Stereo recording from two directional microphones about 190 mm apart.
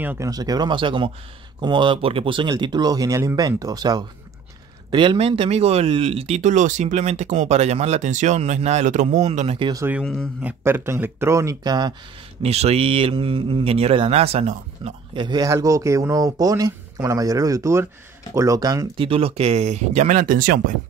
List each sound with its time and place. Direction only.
0.0 s speech: 15° right (ahead or behind); by 9.6 s 35° right (ahead or behind)
9.6 s speech: 20° right (ahead or behind)
12.4 s speech: 35° right (ahead or behind)
15.2 s speech: 20° right (ahead or behind); by 20.7 s 50° right (ahead or behind)